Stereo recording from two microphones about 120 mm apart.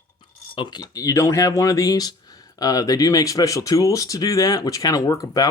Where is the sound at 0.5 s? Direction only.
35° left (ahead or behind).